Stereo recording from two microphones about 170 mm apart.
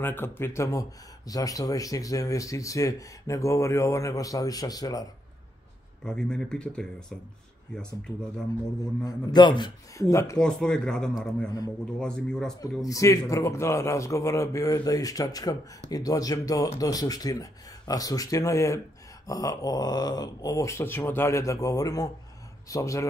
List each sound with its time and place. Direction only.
0.0 s speech: 15° left (ahead or behind)
6.0 s speech: 5° left (ahead or behind)
9.0 s speech: 25° left (ahead or behind)
10.4 s speech: 5° left (ahead or behind)
11.4 s speech: 20° left (ahead or behind)
12.0 s speech: 5° left (ahead or behind)
12.8 s speech: 20° left (ahead or behind)